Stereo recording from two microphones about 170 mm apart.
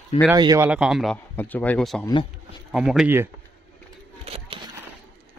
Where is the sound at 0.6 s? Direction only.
5° right (ahead or behind).